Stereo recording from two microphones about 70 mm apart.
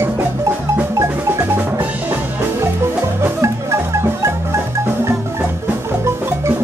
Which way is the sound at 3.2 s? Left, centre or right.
Right.